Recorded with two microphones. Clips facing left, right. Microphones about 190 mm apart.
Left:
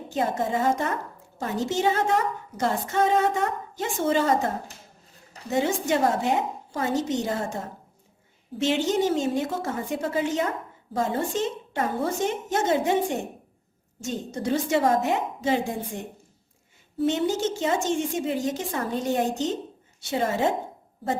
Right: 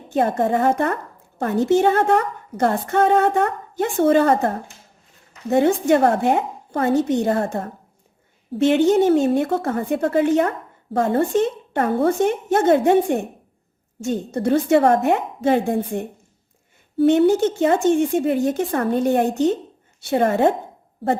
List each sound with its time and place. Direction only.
0.1 s a woman's voice: 55° right (ahead or behind)